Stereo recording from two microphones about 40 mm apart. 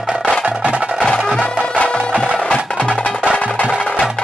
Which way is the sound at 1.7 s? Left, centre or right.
Left.